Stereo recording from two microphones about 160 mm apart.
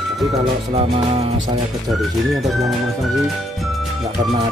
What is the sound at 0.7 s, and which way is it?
Music, 40° right (ahead or behind).